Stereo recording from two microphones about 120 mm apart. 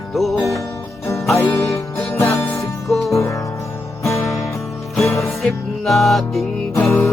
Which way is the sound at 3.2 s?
25° left (ahead or behind).